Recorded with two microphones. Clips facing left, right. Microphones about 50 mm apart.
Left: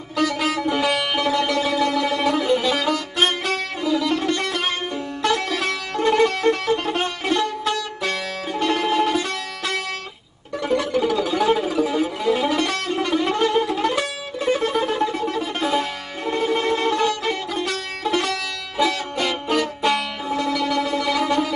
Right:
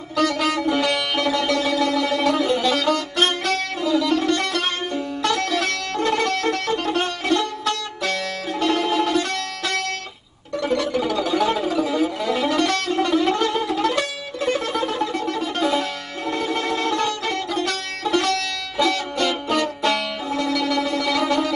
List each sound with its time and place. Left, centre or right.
0.1 s sitar: centre
0.8 s music: centre
10.6 s music: centre